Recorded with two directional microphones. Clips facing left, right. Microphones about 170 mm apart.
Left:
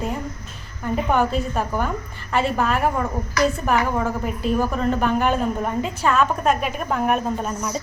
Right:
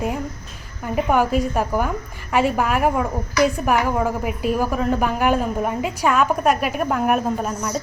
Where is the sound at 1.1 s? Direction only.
10° right (ahead or behind).